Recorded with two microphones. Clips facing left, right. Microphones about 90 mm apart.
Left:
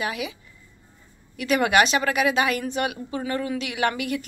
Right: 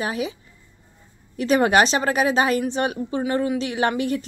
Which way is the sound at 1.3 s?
35° right (ahead or behind).